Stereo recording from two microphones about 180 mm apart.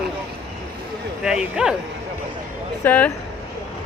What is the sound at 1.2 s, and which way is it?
Speech, 5° right (ahead or behind).